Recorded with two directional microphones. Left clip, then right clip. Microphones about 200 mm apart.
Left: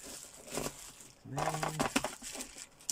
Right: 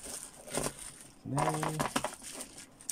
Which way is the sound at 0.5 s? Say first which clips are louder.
Right 3 dB; 10° left (ahead or behind).